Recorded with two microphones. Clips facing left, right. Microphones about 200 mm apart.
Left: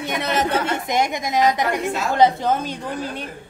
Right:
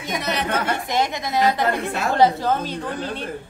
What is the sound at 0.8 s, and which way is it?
A woman's voice, 15° left (ahead or behind).